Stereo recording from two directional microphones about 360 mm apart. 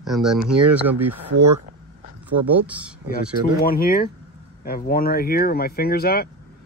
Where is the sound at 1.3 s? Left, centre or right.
Right.